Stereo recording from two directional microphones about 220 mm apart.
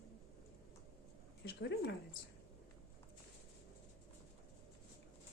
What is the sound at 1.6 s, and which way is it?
Speech, 55° left (ahead or behind).